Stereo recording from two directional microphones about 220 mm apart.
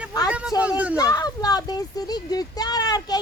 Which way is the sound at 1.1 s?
15° left (ahead or behind).